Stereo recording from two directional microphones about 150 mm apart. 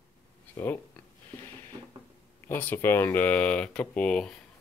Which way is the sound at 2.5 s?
15° left (ahead or behind).